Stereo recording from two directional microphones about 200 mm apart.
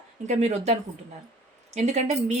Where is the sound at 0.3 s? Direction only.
35° right (ahead or behind).